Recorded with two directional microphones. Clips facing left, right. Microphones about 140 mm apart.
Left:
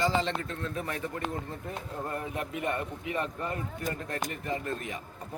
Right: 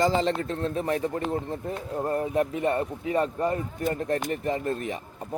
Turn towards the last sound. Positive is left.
turn(degrees=-35)  # may be behind; listen again after turning